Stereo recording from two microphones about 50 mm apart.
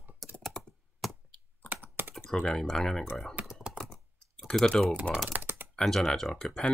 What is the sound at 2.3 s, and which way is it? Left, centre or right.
Speech, centre.